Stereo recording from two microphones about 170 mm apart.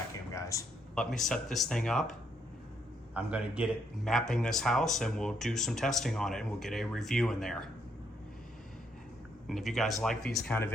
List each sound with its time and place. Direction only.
0.3 s a sound: 20° left (ahead or behind)
0.9 s speech: 5° left (ahead or behind)
3.2 s a man's voice: 10° right (ahead or behind)
4.1 s speech: 5° left (ahead or behind)
9.5 s speech: centre (ahead or behind)